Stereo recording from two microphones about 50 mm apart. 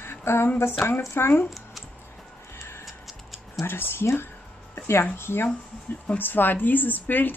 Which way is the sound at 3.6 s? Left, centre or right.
Left.